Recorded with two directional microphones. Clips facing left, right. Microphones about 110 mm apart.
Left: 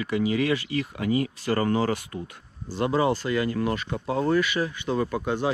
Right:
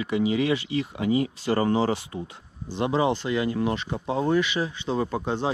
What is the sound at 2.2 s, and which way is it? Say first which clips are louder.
Speech: right 1 dB; 45° left (ahead or behind).